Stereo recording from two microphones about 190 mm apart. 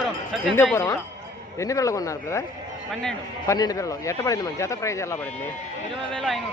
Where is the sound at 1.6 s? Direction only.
15° left (ahead or behind).